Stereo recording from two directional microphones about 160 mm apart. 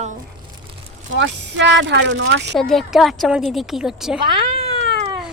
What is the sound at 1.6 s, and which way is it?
Speech, 90° right.